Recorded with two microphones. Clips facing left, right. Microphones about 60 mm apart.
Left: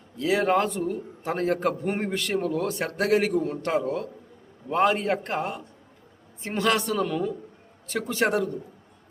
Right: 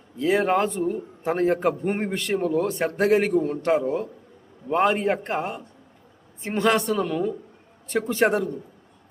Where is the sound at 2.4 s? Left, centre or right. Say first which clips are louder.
Right 4 dB; centre.